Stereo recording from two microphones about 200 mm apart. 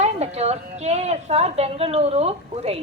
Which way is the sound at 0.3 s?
30° right (ahead or behind).